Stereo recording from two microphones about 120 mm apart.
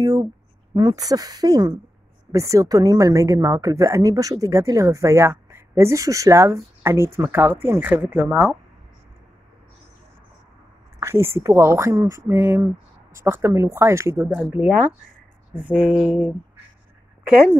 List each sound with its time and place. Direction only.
0.0 s a sound: 30° right (ahead or behind)
0.7 s a woman's voice: 35° right (ahead or behind); by 8.5 s 15° right (ahead or behind)
11.0 s a woman's voice: 20° right (ahead or behind)
14.5 s speech: 10° right (ahead or behind)